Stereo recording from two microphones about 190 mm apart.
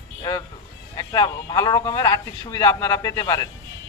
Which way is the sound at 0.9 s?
20° left (ahead or behind).